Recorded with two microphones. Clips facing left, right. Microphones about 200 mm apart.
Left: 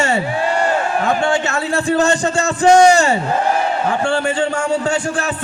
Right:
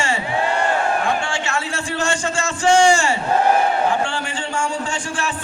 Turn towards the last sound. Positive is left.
turn(degrees=40)  # may be behind; listen again after turning